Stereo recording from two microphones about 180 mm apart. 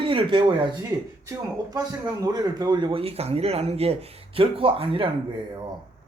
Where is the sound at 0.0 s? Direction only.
25° right (ahead or behind).